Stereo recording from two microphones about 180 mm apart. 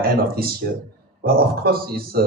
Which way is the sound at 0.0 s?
55° right (ahead or behind).